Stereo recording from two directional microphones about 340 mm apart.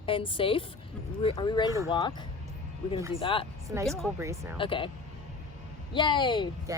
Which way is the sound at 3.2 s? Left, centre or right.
Centre.